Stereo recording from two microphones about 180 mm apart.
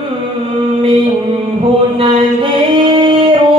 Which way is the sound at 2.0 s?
30° right (ahead or behind).